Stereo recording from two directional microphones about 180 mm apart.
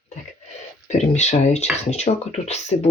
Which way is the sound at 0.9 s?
40° left (ahead or behind).